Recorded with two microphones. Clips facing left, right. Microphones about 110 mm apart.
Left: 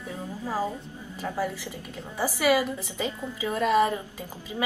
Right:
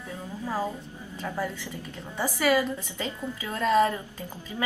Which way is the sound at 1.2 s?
10° left (ahead or behind).